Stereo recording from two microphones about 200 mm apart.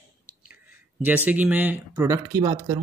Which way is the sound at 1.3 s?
10° right (ahead or behind).